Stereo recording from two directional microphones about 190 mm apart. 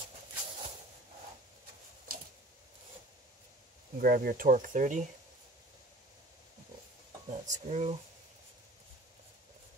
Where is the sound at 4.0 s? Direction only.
50° right (ahead or behind).